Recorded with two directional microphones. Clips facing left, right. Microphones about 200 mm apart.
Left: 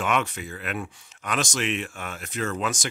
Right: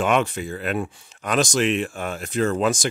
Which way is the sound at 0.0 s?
30° right (ahead or behind).